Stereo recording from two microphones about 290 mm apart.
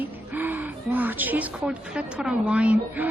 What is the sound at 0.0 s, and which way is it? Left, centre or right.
Speech, centre.